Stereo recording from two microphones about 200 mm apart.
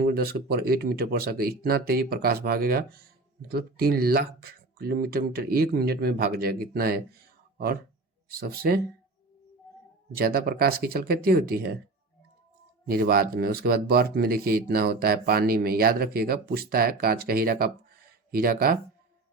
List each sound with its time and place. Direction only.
0.0 s speech: 50° right (ahead or behind)
10.2 s speech: 50° right (ahead or behind)
12.9 s speech: 50° right (ahead or behind)